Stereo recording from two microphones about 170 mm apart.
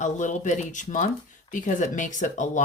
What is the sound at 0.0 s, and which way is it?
Speech, 45° left (ahead or behind).